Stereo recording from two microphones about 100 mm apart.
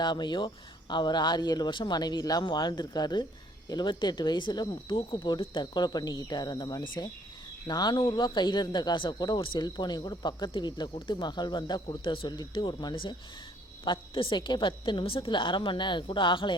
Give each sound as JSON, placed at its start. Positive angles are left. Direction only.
{"t": 0.0, "sound": "a woman's voice", "side_deg": 50}